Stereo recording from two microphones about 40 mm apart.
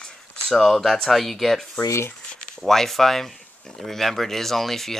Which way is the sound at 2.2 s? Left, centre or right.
Left.